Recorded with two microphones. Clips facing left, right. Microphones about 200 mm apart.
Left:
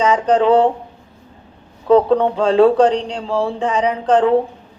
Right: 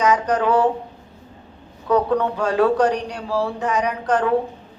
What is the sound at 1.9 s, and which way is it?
A woman's voice, 25° left (ahead or behind).